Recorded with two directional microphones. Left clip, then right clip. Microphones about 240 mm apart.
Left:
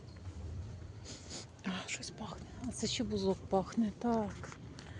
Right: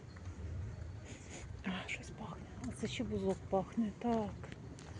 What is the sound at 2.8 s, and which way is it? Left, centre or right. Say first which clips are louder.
Speech: left 4 dB; left.